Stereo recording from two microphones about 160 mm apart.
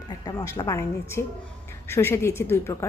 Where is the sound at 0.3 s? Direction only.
20° left (ahead or behind).